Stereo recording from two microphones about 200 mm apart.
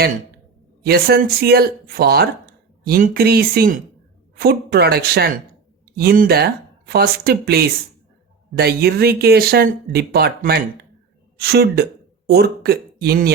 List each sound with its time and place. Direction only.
0.9 s speech: 50° right (ahead or behind)